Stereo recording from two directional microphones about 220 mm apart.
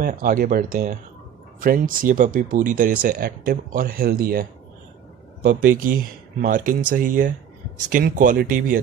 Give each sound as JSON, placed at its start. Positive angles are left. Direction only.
{"t": 0.0, "sound": "speech", "side_deg": -40}